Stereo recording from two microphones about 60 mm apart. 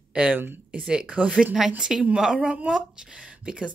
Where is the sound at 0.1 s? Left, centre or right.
Right.